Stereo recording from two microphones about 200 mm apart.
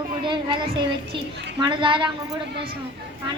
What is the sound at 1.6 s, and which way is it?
Speech, 25° right (ahead or behind).